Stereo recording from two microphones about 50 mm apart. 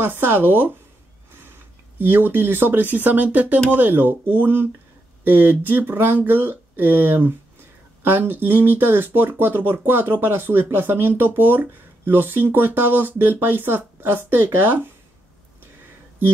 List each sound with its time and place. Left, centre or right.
0.0 s speech: right
2.0 s speech: right